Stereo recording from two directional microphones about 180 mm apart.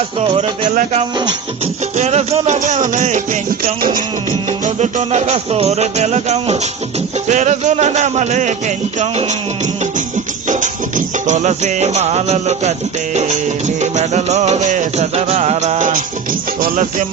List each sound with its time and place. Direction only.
0.2 s speech: 25° right (ahead or behind)
2.0 s music: 40° right (ahead or behind)
10.5 s music: 45° right (ahead or behind)